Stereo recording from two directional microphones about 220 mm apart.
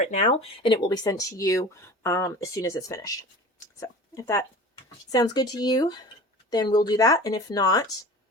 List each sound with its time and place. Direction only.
0.0 s speech: 30° left (ahead or behind)